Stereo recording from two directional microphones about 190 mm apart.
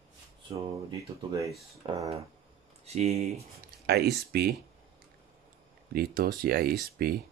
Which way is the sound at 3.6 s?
55° right (ahead or behind).